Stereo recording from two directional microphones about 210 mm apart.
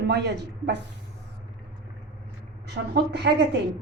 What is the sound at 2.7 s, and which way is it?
Speech, 50° right (ahead or behind).